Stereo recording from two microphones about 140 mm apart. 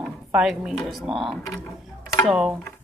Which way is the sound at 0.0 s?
5° right (ahead or behind).